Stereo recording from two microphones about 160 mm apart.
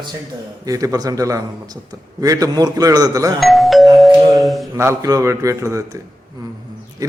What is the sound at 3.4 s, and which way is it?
Doorbell, centre (ahead or behind).